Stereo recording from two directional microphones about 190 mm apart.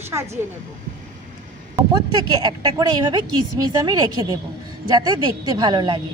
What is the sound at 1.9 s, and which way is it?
Speech, 20° right (ahead or behind).